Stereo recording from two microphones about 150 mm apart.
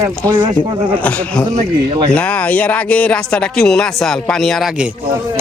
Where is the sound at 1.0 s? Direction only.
10° left (ahead or behind).